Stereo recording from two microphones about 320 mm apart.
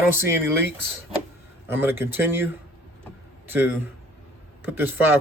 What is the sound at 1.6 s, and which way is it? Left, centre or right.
Speech, centre.